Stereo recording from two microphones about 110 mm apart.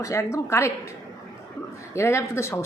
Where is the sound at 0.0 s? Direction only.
25° left (ahead or behind).